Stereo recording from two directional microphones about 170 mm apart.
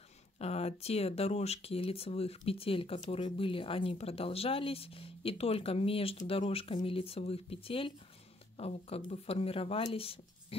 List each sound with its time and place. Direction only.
0.4 s speech: 35° left (ahead or behind)